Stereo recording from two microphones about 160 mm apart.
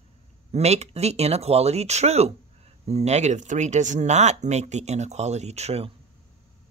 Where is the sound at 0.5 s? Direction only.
40° right (ahead or behind).